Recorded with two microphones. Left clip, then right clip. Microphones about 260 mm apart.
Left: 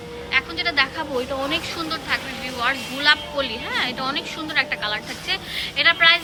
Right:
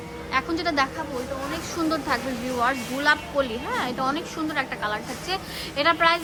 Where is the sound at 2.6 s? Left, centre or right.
Centre.